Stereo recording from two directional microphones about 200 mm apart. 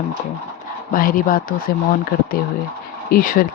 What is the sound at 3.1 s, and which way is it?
Speech, 45° left (ahead or behind).